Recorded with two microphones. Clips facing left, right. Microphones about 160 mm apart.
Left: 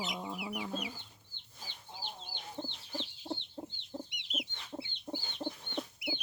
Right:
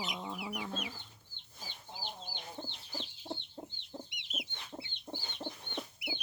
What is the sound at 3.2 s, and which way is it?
Chicken, 10° left (ahead or behind).